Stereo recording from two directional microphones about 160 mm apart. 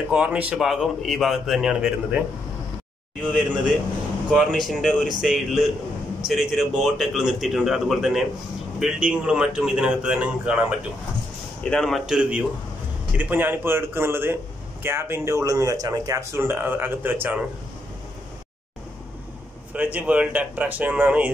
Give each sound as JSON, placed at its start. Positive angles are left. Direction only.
{"t": 0.1, "sound": "a man's voice", "side_deg": -5}
{"t": 4.3, "sound": "a man's voice", "side_deg": 0}
{"t": 11.6, "sound": "a man's voice", "side_deg": 5}
{"t": 19.7, "sound": "a man's voice", "side_deg": -10}